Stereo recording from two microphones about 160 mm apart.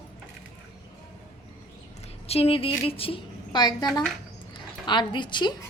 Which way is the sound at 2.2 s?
40° left (ahead or behind).